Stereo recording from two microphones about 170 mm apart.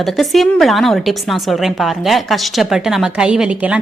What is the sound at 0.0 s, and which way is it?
A woman's voice, centre (ahead or behind).